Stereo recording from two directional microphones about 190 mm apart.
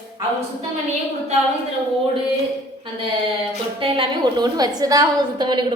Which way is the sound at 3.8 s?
30° right (ahead or behind).